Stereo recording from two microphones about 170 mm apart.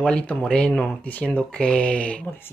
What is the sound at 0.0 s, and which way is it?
Speech, 5° left (ahead or behind).